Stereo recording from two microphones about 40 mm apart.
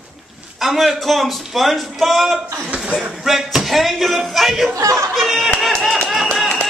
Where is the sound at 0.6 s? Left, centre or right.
Centre.